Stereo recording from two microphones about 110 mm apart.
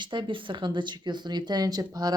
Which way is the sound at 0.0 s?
45° right (ahead or behind).